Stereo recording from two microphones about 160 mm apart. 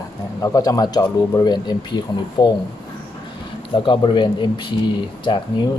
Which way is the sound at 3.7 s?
30° left (ahead or behind).